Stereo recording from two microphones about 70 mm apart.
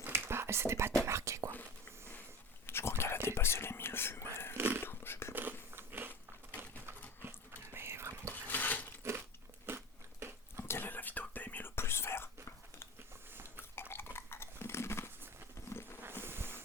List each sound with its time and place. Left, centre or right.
0.0 s whispering: right
2.6 s whispering: left
4.5 s whispering: right
4.8 s a sound: left
5.3 s biting: right
6.6 s a sound: right
7.3 s whispering: right
8.3 s a sound: left
9.6 s biting: right
10.6 s whispering: left
13.7 s chewing: left
16.2 s insect: right